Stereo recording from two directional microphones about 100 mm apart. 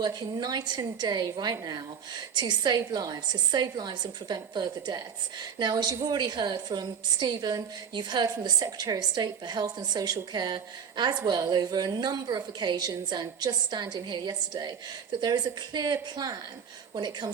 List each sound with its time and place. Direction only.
0.0 s a woman's voice: 45° right (ahead or behind)